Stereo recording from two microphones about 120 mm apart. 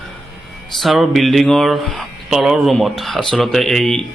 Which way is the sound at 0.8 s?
Centre (ahead or behind).